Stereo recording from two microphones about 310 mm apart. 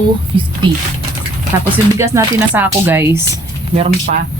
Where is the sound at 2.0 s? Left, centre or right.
Centre.